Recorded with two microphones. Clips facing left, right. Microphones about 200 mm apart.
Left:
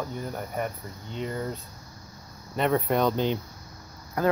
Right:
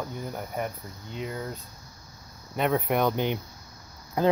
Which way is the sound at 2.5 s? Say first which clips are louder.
Left 1 dB; 10° right (ahead or behind).